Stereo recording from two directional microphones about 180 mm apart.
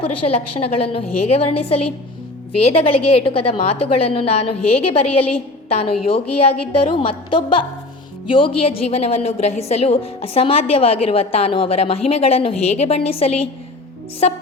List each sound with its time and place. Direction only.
0.0 s a woman's voice: 35° left (ahead or behind)